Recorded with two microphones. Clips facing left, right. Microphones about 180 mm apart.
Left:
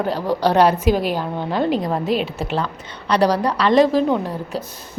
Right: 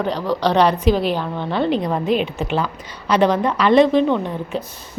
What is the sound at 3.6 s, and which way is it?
Speech, centre (ahead or behind).